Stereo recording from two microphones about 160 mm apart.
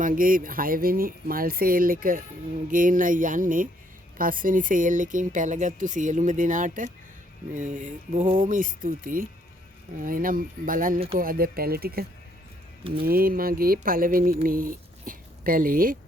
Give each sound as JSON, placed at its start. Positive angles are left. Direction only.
{"t": 0.0, "sound": "speech", "side_deg": -60}